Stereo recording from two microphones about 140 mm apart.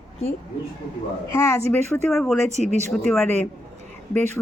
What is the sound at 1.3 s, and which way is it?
Speech, 20° left (ahead or behind).